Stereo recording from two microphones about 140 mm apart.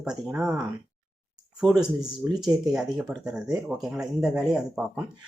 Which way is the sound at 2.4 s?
30° right (ahead or behind).